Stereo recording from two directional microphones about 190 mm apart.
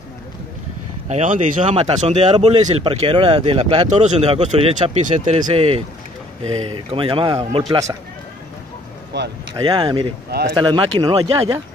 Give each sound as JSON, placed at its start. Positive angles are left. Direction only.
{"t": 1.0, "sound": "a man's voice", "side_deg": -40}
{"t": 9.1, "sound": "speech", "side_deg": -65}
{"t": 9.6, "sound": "a man's voice", "side_deg": -25}